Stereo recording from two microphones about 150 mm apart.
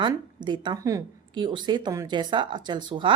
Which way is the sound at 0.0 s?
30° right (ahead or behind).